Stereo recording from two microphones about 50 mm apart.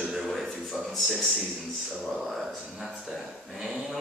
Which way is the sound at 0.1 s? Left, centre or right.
Centre.